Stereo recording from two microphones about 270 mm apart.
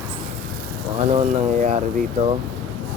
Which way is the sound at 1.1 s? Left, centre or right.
Right.